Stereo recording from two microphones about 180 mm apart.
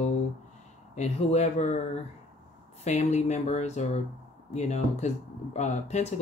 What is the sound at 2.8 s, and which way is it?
Speech, 40° left (ahead or behind).